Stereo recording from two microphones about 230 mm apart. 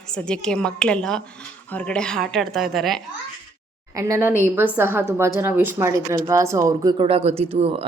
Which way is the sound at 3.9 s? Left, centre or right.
Centre.